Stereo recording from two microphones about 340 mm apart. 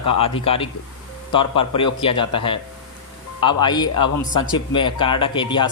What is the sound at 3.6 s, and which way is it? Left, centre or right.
A man's voice, centre.